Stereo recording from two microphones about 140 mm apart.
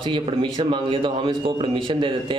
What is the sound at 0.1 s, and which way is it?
A man's voice, 35° right (ahead or behind).